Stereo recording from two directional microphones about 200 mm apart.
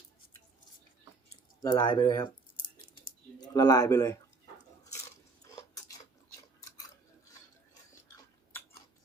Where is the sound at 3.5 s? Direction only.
20° left (ahead or behind).